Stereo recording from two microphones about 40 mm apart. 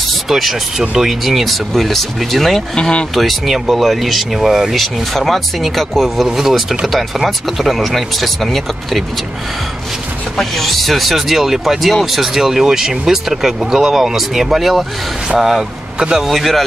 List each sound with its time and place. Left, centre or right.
0.3 s speech: centre
2.7 s speech: left
3.2 s speech: centre
10.3 s speech: centre
16.0 s a man's voice: centre
16.3 s speech: centre